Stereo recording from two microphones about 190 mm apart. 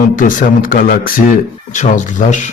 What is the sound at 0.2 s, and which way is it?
A man's voice, 45° left (ahead or behind).